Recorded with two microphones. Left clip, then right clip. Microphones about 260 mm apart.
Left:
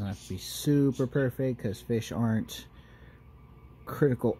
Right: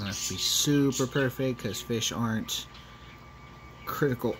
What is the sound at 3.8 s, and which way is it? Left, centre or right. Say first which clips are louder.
Speech: left 1 dB; left.